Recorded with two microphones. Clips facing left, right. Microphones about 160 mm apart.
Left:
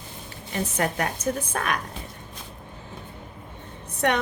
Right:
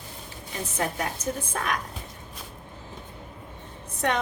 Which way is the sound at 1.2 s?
65° left (ahead or behind).